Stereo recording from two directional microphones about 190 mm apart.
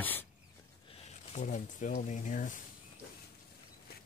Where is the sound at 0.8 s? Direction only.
30° left (ahead or behind).